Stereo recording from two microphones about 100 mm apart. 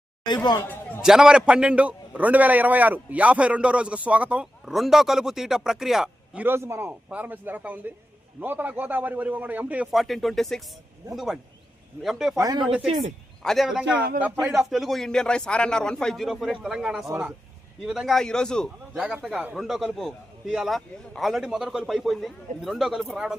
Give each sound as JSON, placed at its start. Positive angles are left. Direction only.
{"t": 0.3, "sound": "speech", "side_deg": 45}
{"t": 1.0, "sound": "a man's voice", "side_deg": -5}
{"t": 6.4, "sound": "a man's voice", "side_deg": -25}
{"t": 9.9, "sound": "speech", "side_deg": 0}
{"t": 12.4, "sound": "speech", "side_deg": -45}
{"t": 13.4, "sound": "speech", "side_deg": 0}
{"t": 14.2, "sound": "a man's voice", "side_deg": -15}
{"t": 14.5, "sound": "speech", "side_deg": 0}
{"t": 18.9, "sound": "a man's voice", "side_deg": -5}